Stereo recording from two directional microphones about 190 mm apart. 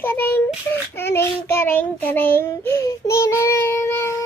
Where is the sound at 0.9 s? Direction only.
10° left (ahead or behind).